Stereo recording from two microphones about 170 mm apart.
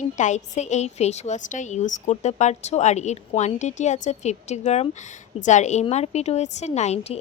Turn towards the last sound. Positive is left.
turn(degrees=40)  # may be behind; listen again after turning